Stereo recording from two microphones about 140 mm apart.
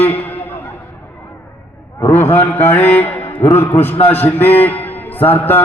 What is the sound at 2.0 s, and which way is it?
A man's voice, 25° left (ahead or behind).